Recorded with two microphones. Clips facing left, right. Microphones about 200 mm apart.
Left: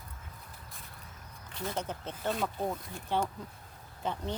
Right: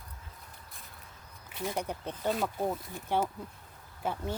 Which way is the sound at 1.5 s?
10° right (ahead or behind).